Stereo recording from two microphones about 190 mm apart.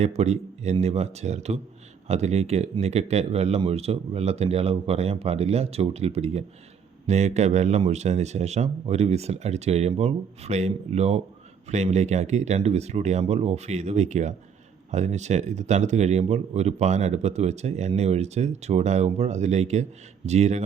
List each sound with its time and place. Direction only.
0.0 s speech: 35° right (ahead or behind)